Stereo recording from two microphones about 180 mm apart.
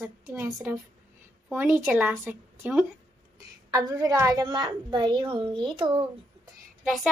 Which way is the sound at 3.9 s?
20° right (ahead or behind).